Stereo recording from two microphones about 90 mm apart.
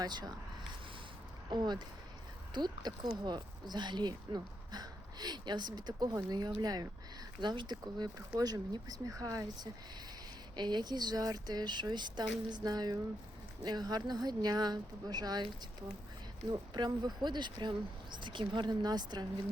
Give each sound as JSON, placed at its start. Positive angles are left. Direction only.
{"t": 0.0, "sound": "speech", "side_deg": -50}
{"t": 1.5, "sound": "speech", "side_deg": -50}
{"t": 7.4, "sound": "speech", "side_deg": -55}
{"t": 10.5, "sound": "speech", "side_deg": -55}
{"t": 16.5, "sound": "speech", "side_deg": -50}